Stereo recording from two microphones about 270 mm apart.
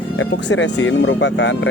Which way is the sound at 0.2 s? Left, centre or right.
Left.